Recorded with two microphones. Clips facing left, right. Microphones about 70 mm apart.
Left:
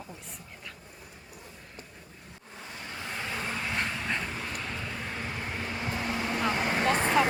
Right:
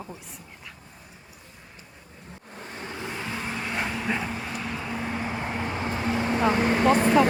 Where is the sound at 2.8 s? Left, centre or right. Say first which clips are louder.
Right 3 dB; right.